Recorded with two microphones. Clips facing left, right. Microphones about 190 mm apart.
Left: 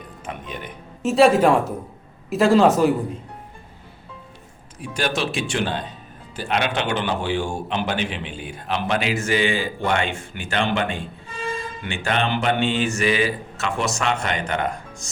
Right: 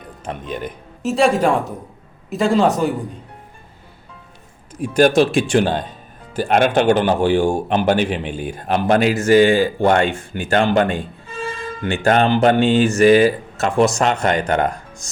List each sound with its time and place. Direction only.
0.3 s speech: 35° right (ahead or behind)
1.0 s a man's voice: centre (ahead or behind)
4.8 s speech: 45° right (ahead or behind)